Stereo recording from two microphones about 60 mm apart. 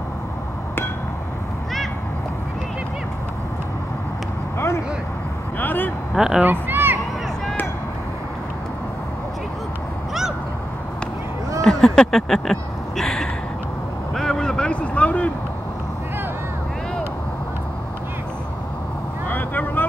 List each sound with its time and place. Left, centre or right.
4.6 s vehicle: left
5.6 s vehicle: left
6.1 s speech: centre
6.4 s a sound: right
11.6 s a sound: centre
19.2 s vehicle: left